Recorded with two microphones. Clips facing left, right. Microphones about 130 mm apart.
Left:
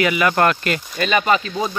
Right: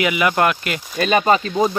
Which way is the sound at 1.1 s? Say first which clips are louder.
Right 2 dB; 35° right (ahead or behind).